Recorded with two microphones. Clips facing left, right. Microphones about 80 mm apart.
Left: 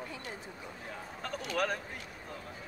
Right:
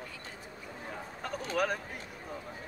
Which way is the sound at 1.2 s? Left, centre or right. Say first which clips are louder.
Right 2 dB; centre.